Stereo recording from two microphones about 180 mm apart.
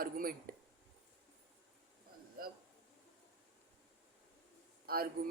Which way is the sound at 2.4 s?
55° right (ahead or behind).